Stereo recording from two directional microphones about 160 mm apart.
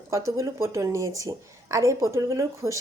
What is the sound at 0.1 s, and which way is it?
Speech, 20° right (ahead or behind).